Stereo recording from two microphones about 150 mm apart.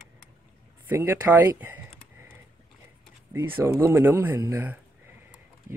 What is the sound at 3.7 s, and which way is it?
Speech, 15° right (ahead or behind).